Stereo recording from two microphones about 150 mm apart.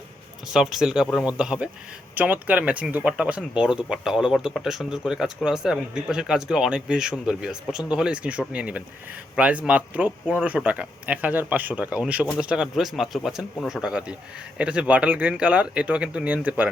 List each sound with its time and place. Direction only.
0.5 s a man's voice: 5° right (ahead or behind)